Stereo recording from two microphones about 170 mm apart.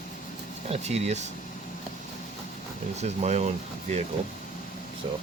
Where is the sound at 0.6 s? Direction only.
40° right (ahead or behind).